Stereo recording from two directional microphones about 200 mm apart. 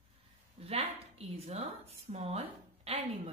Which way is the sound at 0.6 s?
30° right (ahead or behind).